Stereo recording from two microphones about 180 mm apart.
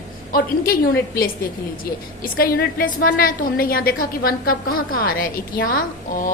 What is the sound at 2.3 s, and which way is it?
A woman's voice, 55° left (ahead or behind).